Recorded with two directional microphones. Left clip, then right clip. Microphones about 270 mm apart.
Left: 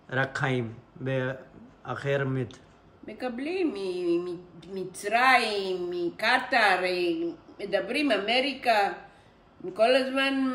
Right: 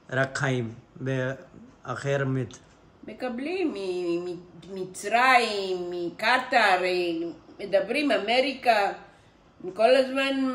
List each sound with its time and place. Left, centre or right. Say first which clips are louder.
0.1 s a woman's voice: right 1 dB; centre